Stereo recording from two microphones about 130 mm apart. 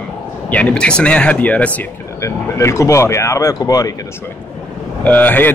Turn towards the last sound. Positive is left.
turn(degrees=15)  # may be behind; listen again after turning